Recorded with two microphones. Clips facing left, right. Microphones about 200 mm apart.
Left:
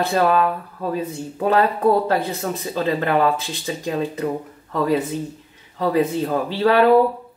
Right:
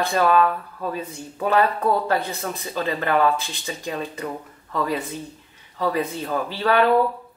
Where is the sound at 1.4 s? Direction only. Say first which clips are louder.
Left 2 dB; 25° left (ahead or behind).